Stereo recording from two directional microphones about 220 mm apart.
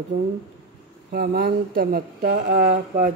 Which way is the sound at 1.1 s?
45° right (ahead or behind).